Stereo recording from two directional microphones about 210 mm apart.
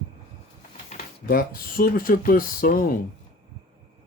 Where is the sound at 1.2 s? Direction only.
45° left (ahead or behind).